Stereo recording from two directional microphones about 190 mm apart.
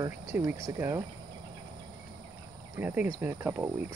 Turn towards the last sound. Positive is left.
turn(degrees=-10)  # may be behind; listen again after turning